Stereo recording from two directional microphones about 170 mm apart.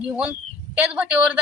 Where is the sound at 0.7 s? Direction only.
10° right (ahead or behind).